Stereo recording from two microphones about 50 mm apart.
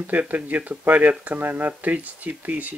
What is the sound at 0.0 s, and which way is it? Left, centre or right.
Speech, right.